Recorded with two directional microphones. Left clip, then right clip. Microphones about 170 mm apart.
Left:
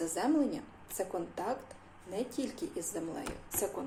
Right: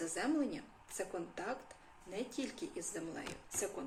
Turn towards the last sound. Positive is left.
turn(degrees=-15)  # may be behind; listen again after turning